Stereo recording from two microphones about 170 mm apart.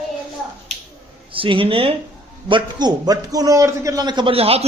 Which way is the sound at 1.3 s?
30° right (ahead or behind).